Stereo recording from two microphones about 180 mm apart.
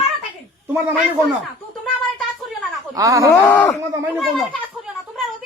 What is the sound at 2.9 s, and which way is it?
Speech, 20° right (ahead or behind).